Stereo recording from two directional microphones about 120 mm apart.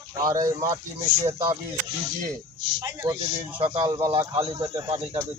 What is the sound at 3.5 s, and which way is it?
Speech, 45° right (ahead or behind).